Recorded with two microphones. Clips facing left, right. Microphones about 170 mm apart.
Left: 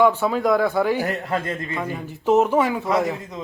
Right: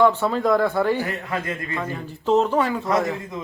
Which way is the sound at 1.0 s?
40° left (ahead or behind).